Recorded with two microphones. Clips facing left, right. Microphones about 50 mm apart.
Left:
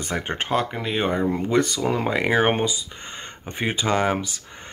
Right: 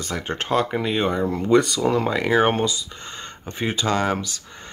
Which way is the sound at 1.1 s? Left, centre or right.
Centre.